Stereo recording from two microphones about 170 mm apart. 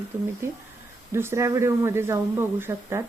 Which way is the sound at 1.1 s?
15° right (ahead or behind).